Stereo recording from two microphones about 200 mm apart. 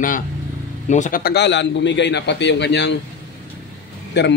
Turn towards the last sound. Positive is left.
turn(degrees=60)  # may be behind; listen again after turning